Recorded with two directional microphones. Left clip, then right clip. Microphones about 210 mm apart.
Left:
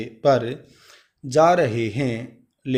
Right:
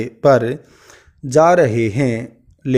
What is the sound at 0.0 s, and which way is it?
A man's voice, 55° right (ahead or behind).